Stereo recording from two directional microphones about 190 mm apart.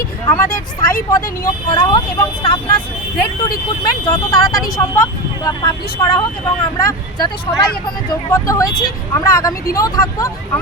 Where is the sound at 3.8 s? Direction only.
15° left (ahead or behind).